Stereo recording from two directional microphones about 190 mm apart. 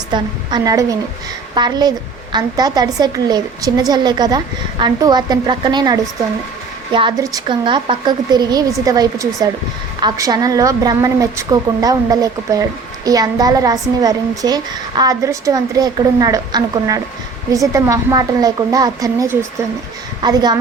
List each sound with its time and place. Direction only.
0.1 s a woman's voice: 20° right (ahead or behind)